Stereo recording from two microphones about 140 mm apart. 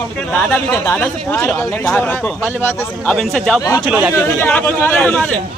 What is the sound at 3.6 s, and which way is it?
Speech, 25° left (ahead or behind).